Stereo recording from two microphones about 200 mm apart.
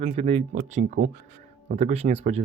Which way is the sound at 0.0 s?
30° right (ahead or behind).